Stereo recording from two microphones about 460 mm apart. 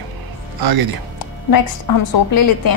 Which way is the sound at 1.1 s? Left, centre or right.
Left.